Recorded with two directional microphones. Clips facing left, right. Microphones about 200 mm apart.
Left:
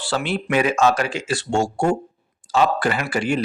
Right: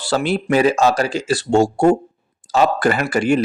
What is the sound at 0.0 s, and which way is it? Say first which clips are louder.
Speech: right 5 dB; 40° right (ahead or behind).